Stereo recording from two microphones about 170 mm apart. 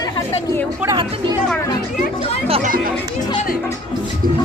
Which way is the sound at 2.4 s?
35° right (ahead or behind).